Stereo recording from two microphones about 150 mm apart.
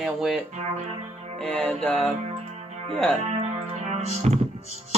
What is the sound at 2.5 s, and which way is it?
Music, 45° right (ahead or behind).